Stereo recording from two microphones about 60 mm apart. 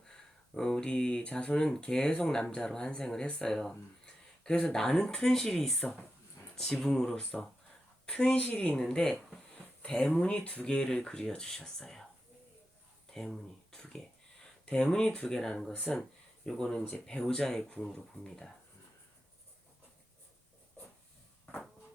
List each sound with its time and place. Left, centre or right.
0.0 s speech: centre
7.2 s a woman's voice: centre
13.1 s speech: centre